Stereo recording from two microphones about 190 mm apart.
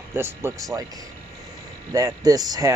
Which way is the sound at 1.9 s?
20° right (ahead or behind).